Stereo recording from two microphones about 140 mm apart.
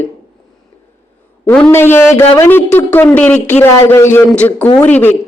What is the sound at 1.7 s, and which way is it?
Speech, 15° left (ahead or behind).